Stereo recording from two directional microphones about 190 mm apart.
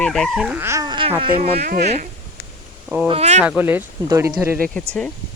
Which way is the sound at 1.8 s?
35° right (ahead or behind).